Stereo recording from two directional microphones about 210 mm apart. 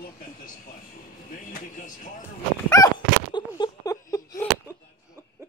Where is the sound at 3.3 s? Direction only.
20° left (ahead or behind).